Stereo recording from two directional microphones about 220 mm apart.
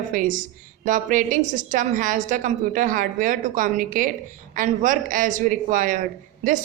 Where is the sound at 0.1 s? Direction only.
35° right (ahead or behind).